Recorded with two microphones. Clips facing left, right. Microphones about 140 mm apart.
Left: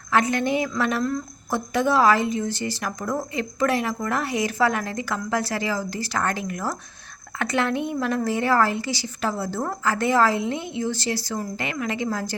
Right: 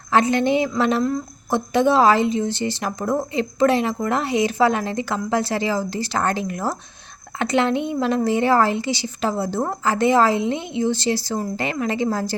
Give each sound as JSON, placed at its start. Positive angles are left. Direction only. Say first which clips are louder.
{"t": 0.1, "sound": "a woman's voice", "louder": "right 4 dB", "side_deg": -25}